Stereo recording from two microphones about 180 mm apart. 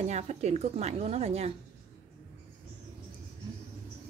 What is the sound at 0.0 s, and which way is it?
A woman's voice, 40° right (ahead or behind).